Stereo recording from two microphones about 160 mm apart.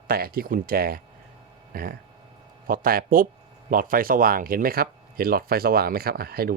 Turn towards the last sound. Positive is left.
turn(degrees=-70)  # may be behind; listen again after turning